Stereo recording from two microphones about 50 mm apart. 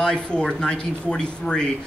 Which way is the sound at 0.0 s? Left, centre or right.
Centre.